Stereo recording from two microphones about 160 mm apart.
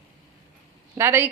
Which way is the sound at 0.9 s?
15° right (ahead or behind).